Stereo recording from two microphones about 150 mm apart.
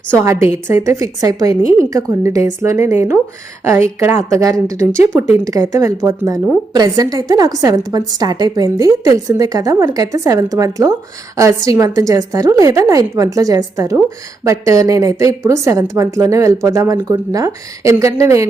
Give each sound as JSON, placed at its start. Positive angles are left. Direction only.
{"t": 0.2, "sound": "a woman's voice", "side_deg": -20}